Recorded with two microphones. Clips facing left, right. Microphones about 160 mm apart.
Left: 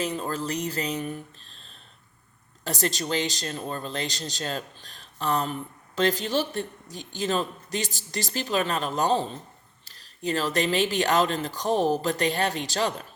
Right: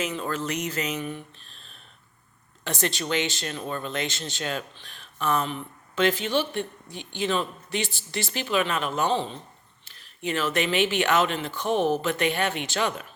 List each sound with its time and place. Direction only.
0.0 s speech: 35° left (ahead or behind)